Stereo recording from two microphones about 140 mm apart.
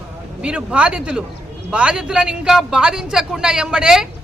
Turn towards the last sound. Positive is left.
turn(degrees=-5)  # may be behind; listen again after turning